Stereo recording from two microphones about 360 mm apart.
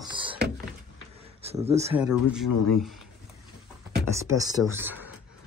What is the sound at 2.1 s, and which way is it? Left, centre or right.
Speech, centre.